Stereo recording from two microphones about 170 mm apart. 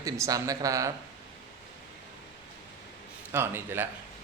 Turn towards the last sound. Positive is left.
turn(degrees=-15)  # may be behind; listen again after turning